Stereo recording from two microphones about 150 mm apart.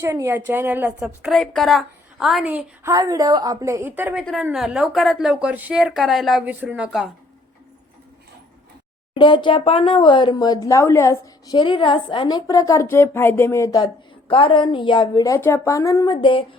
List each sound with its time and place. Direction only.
0.0 s a woman's voice: 15° right (ahead or behind)
2.9 s a woman's voice: 25° right (ahead or behind); by 7.1 s 5° right (ahead or behind)
9.1 s speech: 30° left (ahead or behind)
11.5 s a woman's voice: 30° left (ahead or behind)
15.2 s a woman's voice: 20° left (ahead or behind)
16.2 s speech: 35° left (ahead or behind)